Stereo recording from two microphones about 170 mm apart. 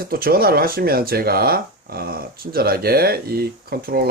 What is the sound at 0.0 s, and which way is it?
Speech, 60° right (ahead or behind).